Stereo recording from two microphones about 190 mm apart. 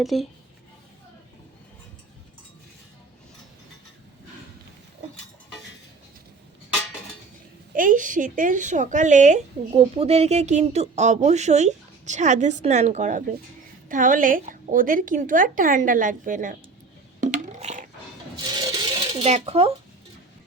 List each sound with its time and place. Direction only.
0.0 s speech: centre (ahead or behind)
7.7 s a woman's voice: 45° right (ahead or behind)
17.2 s a sound: 40° right (ahead or behind)
18.4 s coin: 20° right (ahead or behind)